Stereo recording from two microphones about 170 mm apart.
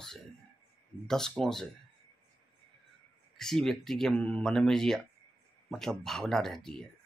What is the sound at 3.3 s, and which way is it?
Speech, centre (ahead or behind).